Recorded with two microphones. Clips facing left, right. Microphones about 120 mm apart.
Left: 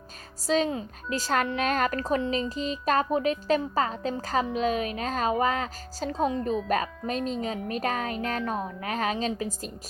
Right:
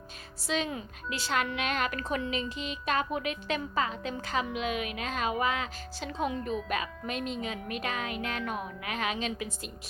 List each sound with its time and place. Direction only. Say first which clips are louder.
0.4 s a woman's voice: left 7 dB; 40° left (ahead or behind)